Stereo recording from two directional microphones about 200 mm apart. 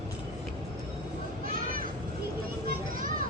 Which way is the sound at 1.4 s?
45° right (ahead or behind).